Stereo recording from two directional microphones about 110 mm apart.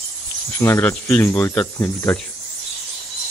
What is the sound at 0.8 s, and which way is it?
Speech, 20° left (ahead or behind).